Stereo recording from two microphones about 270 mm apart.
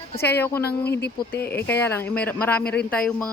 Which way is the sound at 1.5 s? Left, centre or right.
Centre.